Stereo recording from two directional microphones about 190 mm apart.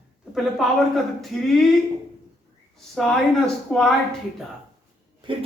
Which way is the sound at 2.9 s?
Centre (ahead or behind).